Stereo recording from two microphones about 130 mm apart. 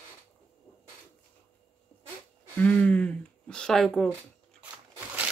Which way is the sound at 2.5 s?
10° left (ahead or behind).